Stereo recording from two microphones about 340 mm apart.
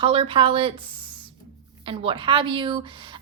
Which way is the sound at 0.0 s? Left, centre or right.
Centre.